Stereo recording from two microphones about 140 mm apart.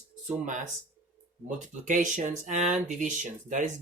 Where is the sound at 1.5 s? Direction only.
65° right (ahead or behind).